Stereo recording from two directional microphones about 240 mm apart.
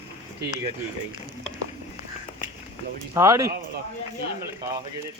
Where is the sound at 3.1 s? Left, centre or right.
Centre.